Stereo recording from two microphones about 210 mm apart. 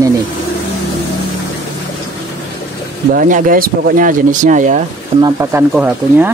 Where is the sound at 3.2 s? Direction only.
40° right (ahead or behind).